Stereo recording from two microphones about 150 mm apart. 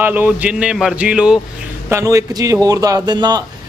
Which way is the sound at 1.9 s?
20° right (ahead or behind).